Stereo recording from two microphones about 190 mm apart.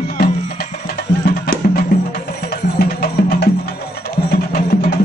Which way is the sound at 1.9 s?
55° left (ahead or behind).